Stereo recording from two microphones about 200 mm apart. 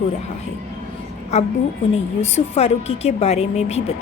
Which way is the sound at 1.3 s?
35° left (ahead or behind).